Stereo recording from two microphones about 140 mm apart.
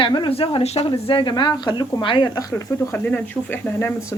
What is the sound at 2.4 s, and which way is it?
Speech, 20° left (ahead or behind).